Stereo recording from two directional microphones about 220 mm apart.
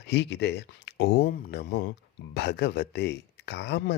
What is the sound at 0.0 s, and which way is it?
Speech, 50° left (ahead or behind).